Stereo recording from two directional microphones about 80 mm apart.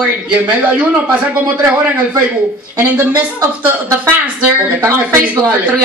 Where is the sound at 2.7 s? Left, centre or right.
Right.